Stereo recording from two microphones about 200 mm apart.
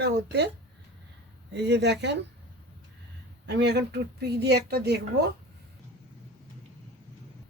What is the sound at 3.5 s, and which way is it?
Speech, 55° right (ahead or behind).